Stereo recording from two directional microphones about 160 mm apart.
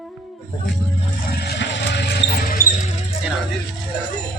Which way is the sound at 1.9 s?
90° left.